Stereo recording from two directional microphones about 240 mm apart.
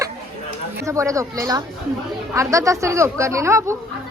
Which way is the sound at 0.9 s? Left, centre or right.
Centre.